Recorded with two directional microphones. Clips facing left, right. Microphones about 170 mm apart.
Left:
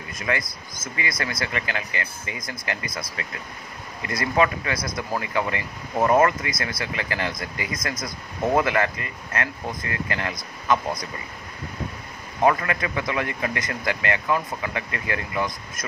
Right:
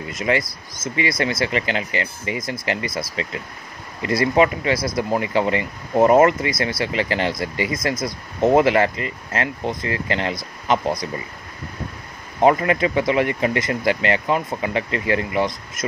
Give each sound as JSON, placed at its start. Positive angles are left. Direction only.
{"t": 0.1, "sound": "speech", "side_deg": -25}
{"t": 12.4, "sound": "speech", "side_deg": -25}